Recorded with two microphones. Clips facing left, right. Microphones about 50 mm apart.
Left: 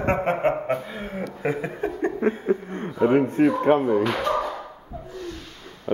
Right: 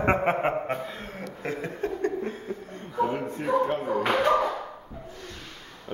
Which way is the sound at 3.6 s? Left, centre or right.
Left.